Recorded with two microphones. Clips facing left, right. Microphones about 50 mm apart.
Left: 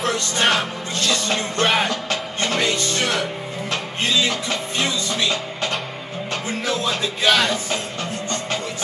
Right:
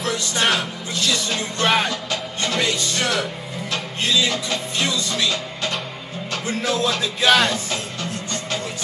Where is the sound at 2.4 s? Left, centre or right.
Left.